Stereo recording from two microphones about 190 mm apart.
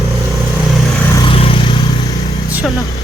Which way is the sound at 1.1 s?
25° left (ahead or behind).